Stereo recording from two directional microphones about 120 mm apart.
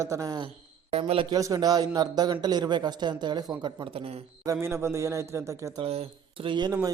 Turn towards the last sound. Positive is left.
turn(degrees=-40)  # may be behind; listen again after turning